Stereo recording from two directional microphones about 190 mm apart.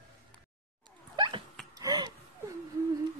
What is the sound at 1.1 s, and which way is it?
Dog, 25° right (ahead or behind).